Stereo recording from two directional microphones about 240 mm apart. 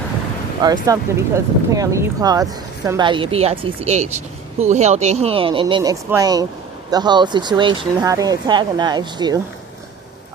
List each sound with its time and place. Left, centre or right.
0.9 s speech: centre